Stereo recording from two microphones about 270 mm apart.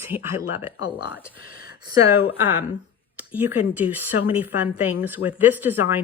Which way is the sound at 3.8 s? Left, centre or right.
Centre.